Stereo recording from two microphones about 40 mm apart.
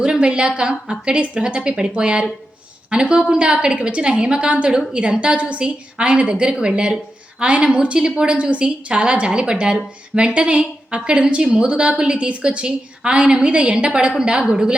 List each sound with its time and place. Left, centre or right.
0.0 s a woman's voice: right